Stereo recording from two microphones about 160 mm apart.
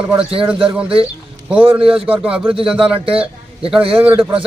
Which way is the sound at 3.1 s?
35° right (ahead or behind).